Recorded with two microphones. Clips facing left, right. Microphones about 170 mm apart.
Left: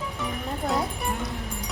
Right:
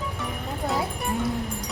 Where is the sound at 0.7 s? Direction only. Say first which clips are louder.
Even; centre (ahead or behind).